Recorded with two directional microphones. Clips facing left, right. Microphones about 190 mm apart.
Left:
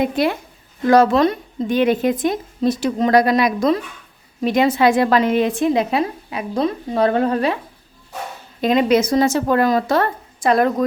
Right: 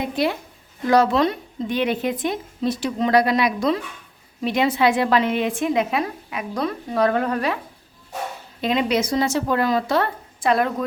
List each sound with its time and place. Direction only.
0.0 s a woman's voice: 55° left (ahead or behind); by 7.6 s 30° left (ahead or behind)
8.6 s a woman's voice: 45° left (ahead or behind)